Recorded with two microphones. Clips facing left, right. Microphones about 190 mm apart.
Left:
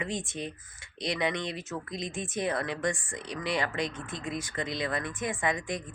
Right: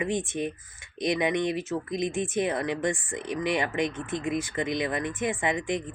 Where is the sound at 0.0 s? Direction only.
15° right (ahead or behind).